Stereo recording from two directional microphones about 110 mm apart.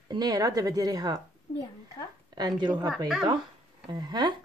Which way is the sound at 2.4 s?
40° right (ahead or behind).